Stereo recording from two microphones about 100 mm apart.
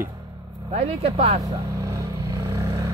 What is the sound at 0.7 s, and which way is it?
Speech, 90° right.